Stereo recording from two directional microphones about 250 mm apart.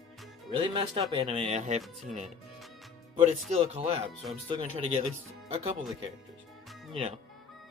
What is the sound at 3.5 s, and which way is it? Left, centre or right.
Speech, right.